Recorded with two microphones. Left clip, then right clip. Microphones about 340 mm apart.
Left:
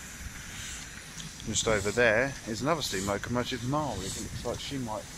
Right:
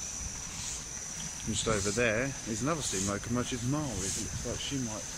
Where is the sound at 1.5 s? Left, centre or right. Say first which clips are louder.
Left 4 dB; centre.